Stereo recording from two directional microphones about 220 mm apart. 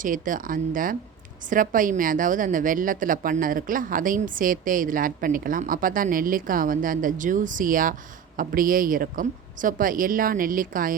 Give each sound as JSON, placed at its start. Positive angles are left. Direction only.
{"t": 0.0, "sound": "a woman's voice", "side_deg": -35}